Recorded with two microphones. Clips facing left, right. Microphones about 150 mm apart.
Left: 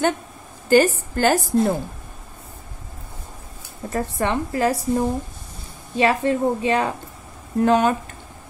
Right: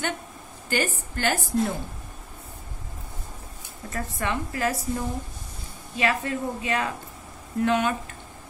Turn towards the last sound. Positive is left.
turn(degrees=35)  # may be behind; listen again after turning